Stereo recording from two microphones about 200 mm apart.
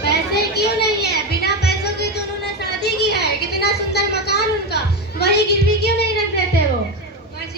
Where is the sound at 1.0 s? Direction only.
55° left (ahead or behind).